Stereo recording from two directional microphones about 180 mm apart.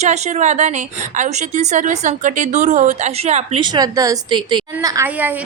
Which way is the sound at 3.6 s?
20° right (ahead or behind).